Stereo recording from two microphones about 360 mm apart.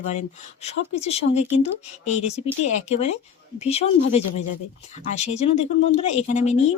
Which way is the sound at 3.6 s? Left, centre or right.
Centre.